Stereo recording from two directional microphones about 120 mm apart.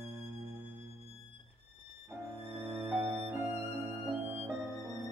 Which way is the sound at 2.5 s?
20° right (ahead or behind).